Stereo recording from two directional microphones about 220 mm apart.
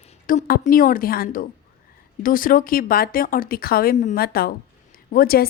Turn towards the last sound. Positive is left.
turn(degrees=40)  # may be behind; listen again after turning